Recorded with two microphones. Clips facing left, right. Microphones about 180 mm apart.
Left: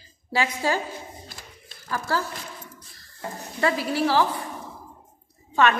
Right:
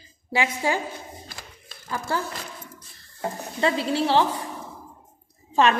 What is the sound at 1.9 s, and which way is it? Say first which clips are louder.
Speech: left 1 dB; 20° right (ahead or behind).